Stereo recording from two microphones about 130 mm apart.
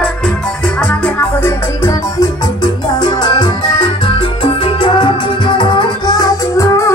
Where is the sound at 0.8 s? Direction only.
10° left (ahead or behind).